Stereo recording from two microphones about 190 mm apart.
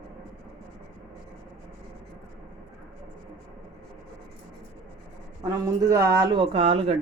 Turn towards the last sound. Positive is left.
turn(degrees=-30)  # may be behind; listen again after turning